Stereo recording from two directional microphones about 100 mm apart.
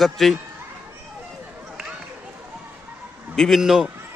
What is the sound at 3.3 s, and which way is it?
Speech, centre (ahead or behind).